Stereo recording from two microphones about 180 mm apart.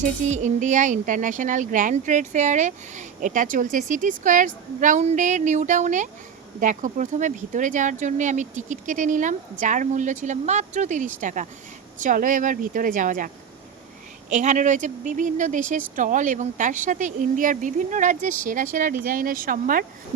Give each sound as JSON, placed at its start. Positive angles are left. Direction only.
{"t": 0.0, "sound": "speech", "side_deg": -40}